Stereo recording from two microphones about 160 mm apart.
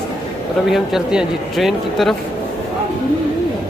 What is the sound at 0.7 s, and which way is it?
Speech, centre (ahead or behind).